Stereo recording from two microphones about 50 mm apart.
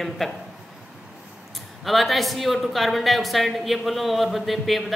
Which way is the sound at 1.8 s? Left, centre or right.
Centre.